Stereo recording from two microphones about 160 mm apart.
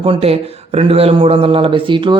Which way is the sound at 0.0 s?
35° right (ahead or behind).